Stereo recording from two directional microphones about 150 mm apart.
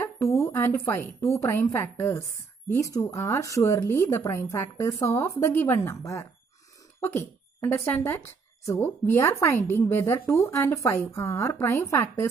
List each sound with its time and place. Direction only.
0.0 s a woman's voice: 20° left (ahead or behind)